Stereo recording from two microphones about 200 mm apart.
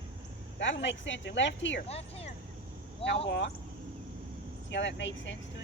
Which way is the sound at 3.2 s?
60° left (ahead or behind).